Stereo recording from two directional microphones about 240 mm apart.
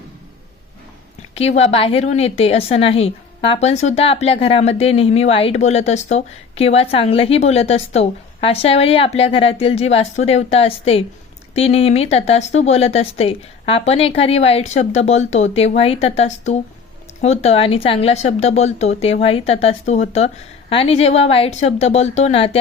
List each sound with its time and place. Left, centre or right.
1.4 s a woman's voice: left